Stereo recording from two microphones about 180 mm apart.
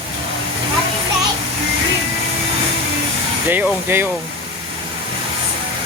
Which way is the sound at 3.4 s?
10° right (ahead or behind).